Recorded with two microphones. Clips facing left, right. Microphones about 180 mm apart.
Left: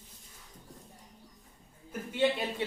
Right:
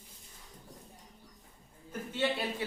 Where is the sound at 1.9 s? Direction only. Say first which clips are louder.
Left 4 dB; 15° left (ahead or behind).